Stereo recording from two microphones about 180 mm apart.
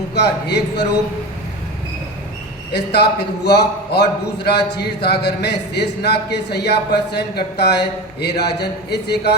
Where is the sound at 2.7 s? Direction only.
65° left (ahead or behind).